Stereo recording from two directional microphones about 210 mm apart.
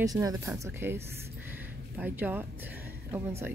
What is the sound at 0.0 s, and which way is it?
Speech, 15° right (ahead or behind).